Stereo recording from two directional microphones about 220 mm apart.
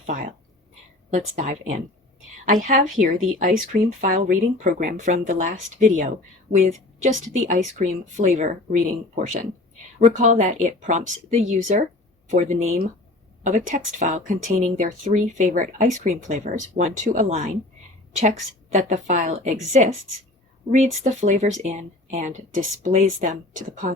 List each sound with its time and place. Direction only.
0.0 s a sound: 35° right (ahead or behind)
2.5 s speech: 35° right (ahead or behind)
20.7 s speech: 35° right (ahead or behind)